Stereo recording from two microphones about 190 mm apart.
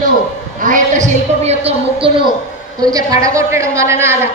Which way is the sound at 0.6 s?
40° right (ahead or behind).